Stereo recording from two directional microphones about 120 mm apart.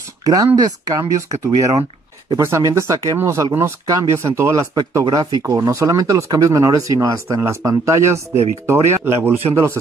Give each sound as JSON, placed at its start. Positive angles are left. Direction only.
{"t": 0.2, "sound": "speech", "side_deg": -30}